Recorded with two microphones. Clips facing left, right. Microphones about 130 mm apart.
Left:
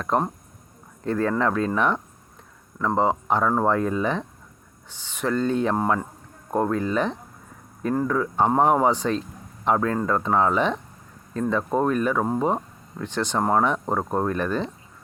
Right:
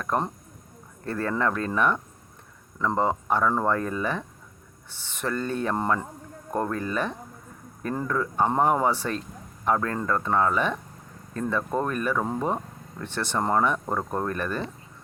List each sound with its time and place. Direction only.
1.0 s speech: 15° left (ahead or behind)
5.7 s speech: 5° left (ahead or behind)
7.8 s speech: 5° left (ahead or behind)
13.7 s speech: 20° left (ahead or behind)